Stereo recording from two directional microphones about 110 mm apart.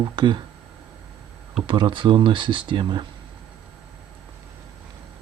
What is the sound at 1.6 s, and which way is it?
Speech, 45° right (ahead or behind).